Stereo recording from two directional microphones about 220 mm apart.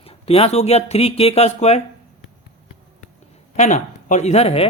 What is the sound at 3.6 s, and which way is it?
Speech, 35° left (ahead or behind).